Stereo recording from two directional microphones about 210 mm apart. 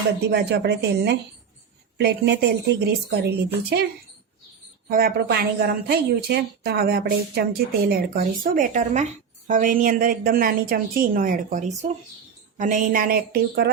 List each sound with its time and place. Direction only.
0.3 s a woman's voice: 50° right (ahead or behind)
4.9 s a woman's voice: 45° right (ahead or behind)